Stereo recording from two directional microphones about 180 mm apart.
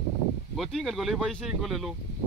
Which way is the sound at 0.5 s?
Centre (ahead or behind).